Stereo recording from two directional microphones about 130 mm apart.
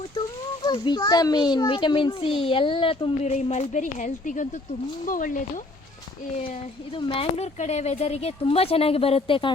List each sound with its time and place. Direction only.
0.6 s a child's voice: 35° left (ahead or behind)
3.2 s a woman's voice: 60° left (ahead or behind)
5.0 s speech: 90° left
6.9 s speech: 45° left (ahead or behind)